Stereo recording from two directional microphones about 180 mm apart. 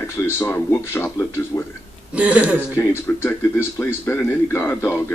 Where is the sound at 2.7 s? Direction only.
15° left (ahead or behind).